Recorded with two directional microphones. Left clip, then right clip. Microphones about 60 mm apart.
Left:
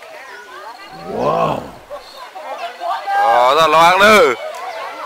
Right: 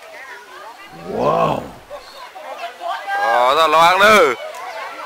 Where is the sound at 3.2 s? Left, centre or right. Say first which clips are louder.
Left 3 dB; centre.